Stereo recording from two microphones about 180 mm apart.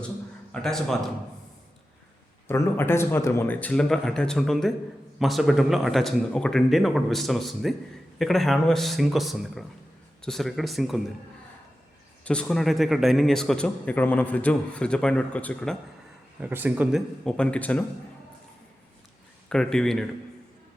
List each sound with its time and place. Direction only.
0.5 s a man's voice: 5° left (ahead or behind)
2.5 s a man's voice: 15° left (ahead or behind)
12.2 s a man's voice: 5° left (ahead or behind)
16.4 s speech: 10° right (ahead or behind)
17.2 s speech: 5° left (ahead or behind)
19.5 s a man's voice: 5° left (ahead or behind)